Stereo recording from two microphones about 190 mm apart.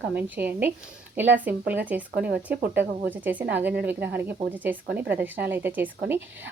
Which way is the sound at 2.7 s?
10° right (ahead or behind).